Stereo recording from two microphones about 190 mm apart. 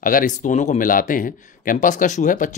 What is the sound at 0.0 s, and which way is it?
Speech, 45° left (ahead or behind).